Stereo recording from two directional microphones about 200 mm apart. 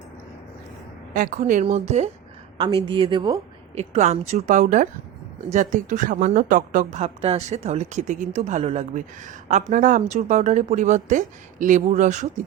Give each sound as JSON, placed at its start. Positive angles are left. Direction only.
{"t": 1.1, "sound": "speech", "side_deg": -40}
{"t": 2.8, "sound": "a woman's voice", "side_deg": -25}
{"t": 3.8, "sound": "speech", "side_deg": -35}